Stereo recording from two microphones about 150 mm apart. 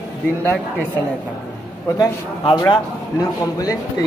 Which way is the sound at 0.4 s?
15° left (ahead or behind).